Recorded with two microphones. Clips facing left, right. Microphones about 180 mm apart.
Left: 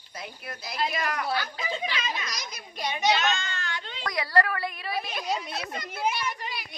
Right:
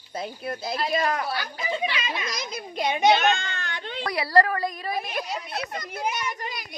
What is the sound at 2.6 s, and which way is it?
A child's voice, 50° right (ahead or behind).